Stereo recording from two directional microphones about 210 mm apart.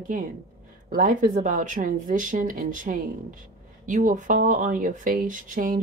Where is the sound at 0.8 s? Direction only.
40° right (ahead or behind).